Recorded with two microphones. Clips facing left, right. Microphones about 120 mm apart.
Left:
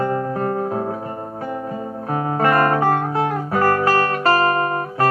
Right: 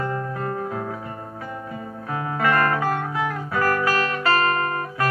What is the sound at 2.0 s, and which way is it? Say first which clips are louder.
Guitar: left 4 dB; 35° left (ahead or behind).